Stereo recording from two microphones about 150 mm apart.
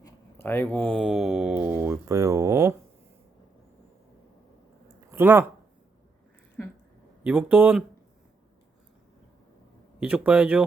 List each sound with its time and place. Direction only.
0.0 s a sound: 15° left (ahead or behind)
0.9 s speech: centre (ahead or behind); by 2.7 s 20° right (ahead or behind)
5.1 s speech: 15° right (ahead or behind)
7.3 s speech: 10° right (ahead or behind)
10.0 s speech: 10° right (ahead or behind)